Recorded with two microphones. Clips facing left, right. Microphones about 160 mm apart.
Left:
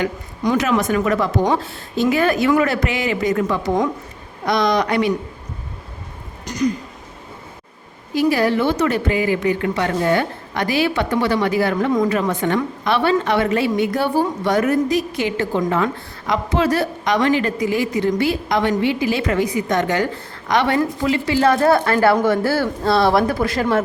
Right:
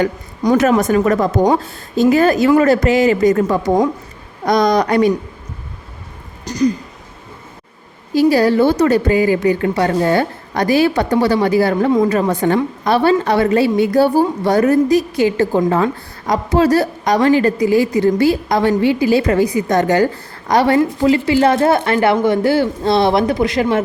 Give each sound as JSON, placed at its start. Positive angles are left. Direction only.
{"t": 0.0, "sound": "speech", "side_deg": -45}
{"t": 6.4, "sound": "a sound", "side_deg": -35}
{"t": 8.1, "sound": "speech", "side_deg": -35}